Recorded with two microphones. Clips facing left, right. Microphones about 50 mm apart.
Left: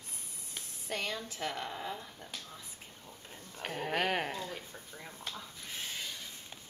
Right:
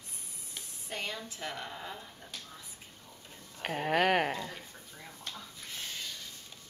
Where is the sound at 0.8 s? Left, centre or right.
Left.